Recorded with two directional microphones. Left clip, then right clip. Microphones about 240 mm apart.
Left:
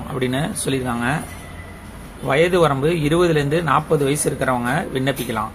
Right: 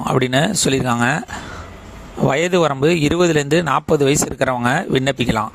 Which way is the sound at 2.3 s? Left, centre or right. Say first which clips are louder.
Left 1 dB; right.